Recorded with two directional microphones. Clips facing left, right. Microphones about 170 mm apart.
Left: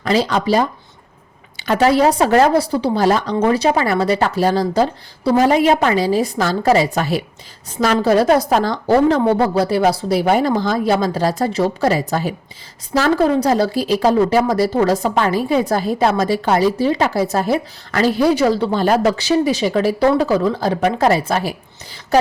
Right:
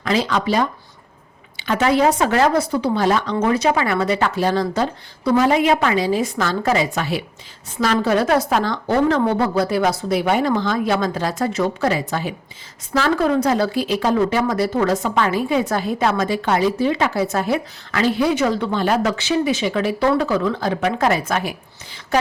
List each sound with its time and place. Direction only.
0.0 s speech: 35° left (ahead or behind)